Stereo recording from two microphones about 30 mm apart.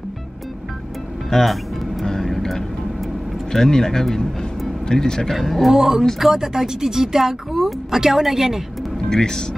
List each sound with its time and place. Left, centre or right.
1.3 s music: centre
2.0 s vehicle: centre
3.5 s speech: centre
5.3 s a man's voice: centre
5.7 s a woman's voice: centre
6.5 s a woman's voice: centre
9.1 s speech: left